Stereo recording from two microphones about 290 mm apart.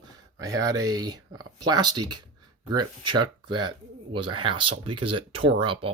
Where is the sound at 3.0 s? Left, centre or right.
Right.